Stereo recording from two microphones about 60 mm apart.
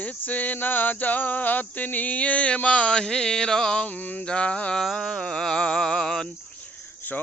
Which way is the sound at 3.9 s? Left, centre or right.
Left.